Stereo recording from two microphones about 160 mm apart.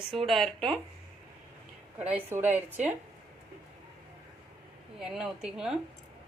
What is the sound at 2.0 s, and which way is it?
Speech, 40° right (ahead or behind).